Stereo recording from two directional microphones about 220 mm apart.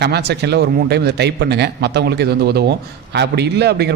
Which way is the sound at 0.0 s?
50° right (ahead or behind).